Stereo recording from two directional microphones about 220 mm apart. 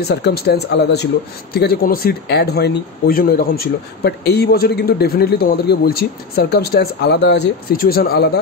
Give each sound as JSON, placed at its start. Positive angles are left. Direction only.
{"t": 0.1, "sound": "speech", "side_deg": 45}